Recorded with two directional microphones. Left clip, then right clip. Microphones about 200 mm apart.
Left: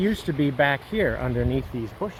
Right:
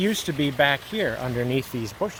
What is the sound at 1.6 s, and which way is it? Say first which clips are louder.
Speech: right 2 dB; 60° right (ahead or behind).